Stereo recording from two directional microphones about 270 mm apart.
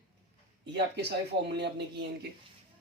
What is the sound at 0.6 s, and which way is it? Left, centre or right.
A man's voice, right.